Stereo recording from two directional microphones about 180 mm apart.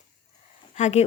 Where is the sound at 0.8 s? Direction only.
40° left (ahead or behind).